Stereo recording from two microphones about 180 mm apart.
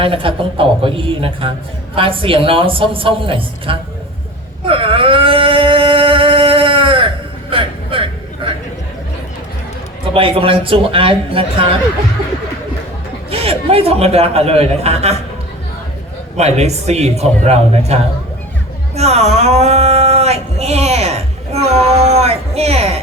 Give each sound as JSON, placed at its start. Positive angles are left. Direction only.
{"t": 0.0, "sound": "speech", "side_deg": -30}
{"t": 4.6, "sound": "a sound", "side_deg": -30}
{"t": 7.5, "sound": "vehicle", "side_deg": -30}
{"t": 10.2, "sound": "a man's voice", "side_deg": -30}
{"t": 13.3, "sound": "a man's voice", "side_deg": -35}
{"t": 16.4, "sound": "a man's voice", "side_deg": -35}
{"t": 18.9, "sound": "a sound", "side_deg": -35}